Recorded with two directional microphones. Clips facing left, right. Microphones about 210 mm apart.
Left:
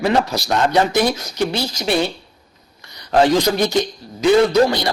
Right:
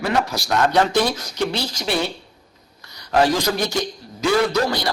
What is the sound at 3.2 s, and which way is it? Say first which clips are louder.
A man's voice: left 4 dB; 20° left (ahead or behind).